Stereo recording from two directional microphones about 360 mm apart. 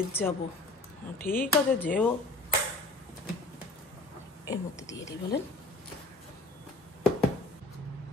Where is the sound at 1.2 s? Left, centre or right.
Left.